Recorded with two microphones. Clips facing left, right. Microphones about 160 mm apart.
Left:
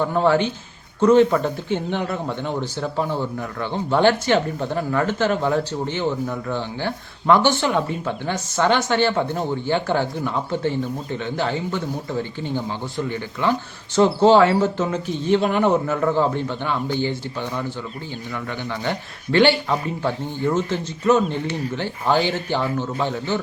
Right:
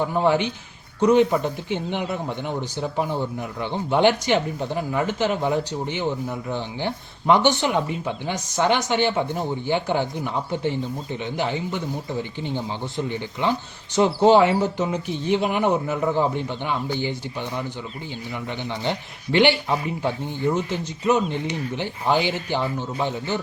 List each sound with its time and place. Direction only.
0.1 s speech: 15° right (ahead or behind)